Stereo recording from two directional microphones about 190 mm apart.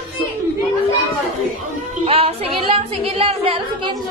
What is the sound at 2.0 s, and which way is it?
Music, 30° right (ahead or behind).